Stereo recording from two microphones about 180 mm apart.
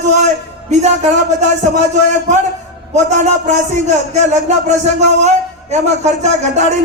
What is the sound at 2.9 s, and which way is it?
A man's voice, 40° right (ahead or behind).